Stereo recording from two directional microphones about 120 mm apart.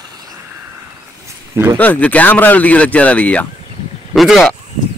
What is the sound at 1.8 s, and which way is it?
Speech, 15° left (ahead or behind).